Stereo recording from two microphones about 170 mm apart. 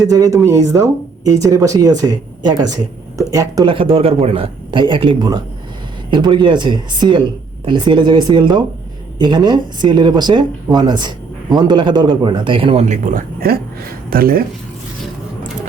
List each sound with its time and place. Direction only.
0.1 s speech: 20° right (ahead or behind)
12.9 s speech: 55° right (ahead or behind)